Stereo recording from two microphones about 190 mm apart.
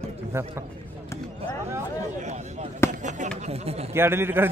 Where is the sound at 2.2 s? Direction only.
35° right (ahead or behind).